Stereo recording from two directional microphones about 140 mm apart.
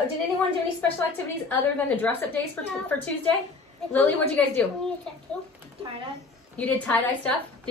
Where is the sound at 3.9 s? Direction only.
10° left (ahead or behind).